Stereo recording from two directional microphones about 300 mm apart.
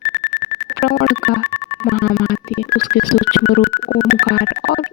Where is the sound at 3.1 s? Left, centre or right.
Left.